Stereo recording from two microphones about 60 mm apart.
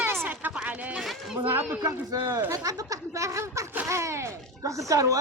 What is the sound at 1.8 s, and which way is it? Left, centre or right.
Speech, right.